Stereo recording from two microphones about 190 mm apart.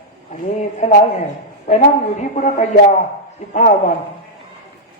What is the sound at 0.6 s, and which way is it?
Speech, 35° left (ahead or behind).